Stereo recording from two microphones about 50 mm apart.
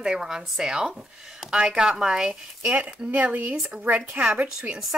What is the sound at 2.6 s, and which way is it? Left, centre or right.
Speech, right.